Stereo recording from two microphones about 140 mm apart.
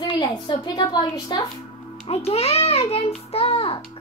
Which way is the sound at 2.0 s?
45° left (ahead or behind).